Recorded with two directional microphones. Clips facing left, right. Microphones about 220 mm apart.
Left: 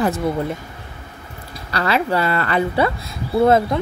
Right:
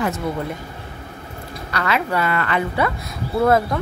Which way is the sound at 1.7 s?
30° left (ahead or behind).